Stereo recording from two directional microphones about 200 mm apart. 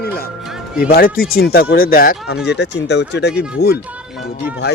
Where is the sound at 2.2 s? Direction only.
55° left (ahead or behind).